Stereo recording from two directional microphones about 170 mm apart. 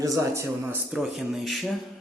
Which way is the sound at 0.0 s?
20° right (ahead or behind).